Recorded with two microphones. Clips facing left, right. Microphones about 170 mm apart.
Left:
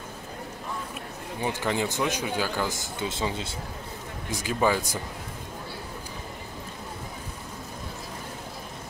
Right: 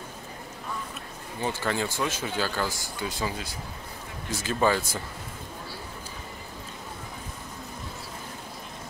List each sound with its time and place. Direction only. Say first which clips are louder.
1.4 s speech: left 1 dB; 15° left (ahead or behind)
4.3 s speech: even; 15° left (ahead or behind)